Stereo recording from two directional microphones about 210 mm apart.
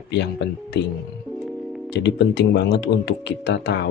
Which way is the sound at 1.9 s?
55° left (ahead or behind).